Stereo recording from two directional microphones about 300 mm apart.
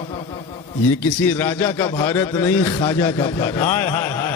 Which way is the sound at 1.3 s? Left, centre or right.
Centre.